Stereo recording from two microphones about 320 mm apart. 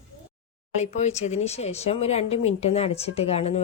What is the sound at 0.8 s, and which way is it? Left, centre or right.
Speech, left.